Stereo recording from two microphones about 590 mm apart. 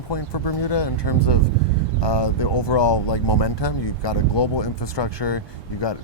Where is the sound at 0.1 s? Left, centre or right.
Left.